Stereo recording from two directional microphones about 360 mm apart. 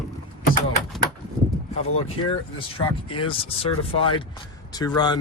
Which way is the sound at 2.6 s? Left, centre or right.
Centre.